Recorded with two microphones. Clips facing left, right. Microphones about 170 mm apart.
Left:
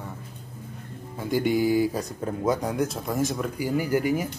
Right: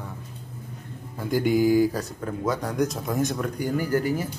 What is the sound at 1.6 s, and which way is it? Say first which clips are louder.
Speech: right 5 dB; 40° right (ahead or behind).